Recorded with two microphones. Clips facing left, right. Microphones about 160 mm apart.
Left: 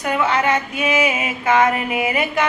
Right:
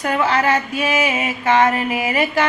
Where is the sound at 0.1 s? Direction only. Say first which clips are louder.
Even; 30° right (ahead or behind).